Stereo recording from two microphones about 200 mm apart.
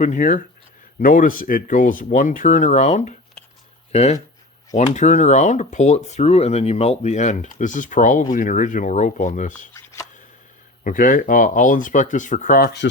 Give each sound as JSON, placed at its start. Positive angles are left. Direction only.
{"t": 0.0, "sound": "speech", "side_deg": 40}
{"t": 9.7, "sound": "a sound", "side_deg": 15}
{"t": 10.8, "sound": "speech", "side_deg": 40}